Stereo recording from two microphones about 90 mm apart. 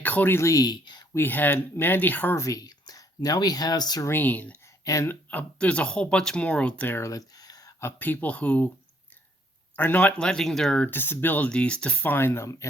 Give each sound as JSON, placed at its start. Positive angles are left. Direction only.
{"t": 0.0, "sound": "speech", "side_deg": 20}
{"t": 0.4, "sound": "speech", "side_deg": 40}
{"t": 1.1, "sound": "speech", "side_deg": 20}
{"t": 2.3, "sound": "speech", "side_deg": 35}
{"t": 4.0, "sound": "speech", "side_deg": 20}
{"t": 4.8, "sound": "speech", "side_deg": 40}
{"t": 5.0, "sound": "speech", "side_deg": 15}
{"t": 7.1, "sound": "a sound", "side_deg": 45}
{"t": 7.9, "sound": "speech", "side_deg": 20}
{"t": 9.7, "sound": "speech", "side_deg": 20}
{"t": 10.8, "sound": "speech", "side_deg": 25}